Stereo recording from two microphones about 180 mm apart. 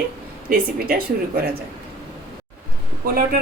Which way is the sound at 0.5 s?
55° right (ahead or behind).